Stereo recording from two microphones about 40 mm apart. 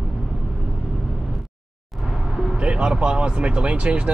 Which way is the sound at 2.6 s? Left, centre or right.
Right.